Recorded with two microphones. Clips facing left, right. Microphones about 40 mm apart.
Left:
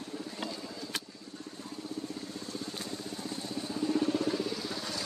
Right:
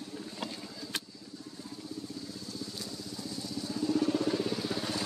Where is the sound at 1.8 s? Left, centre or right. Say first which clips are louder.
Left 2 dB; left.